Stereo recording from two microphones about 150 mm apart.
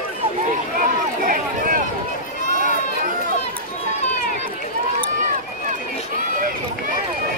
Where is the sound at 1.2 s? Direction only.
65° right (ahead or behind).